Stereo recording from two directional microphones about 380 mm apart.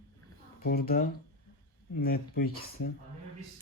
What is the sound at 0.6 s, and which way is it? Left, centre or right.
Speech, left.